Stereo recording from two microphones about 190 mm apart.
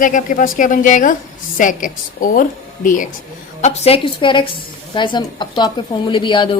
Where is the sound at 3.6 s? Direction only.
35° left (ahead or behind).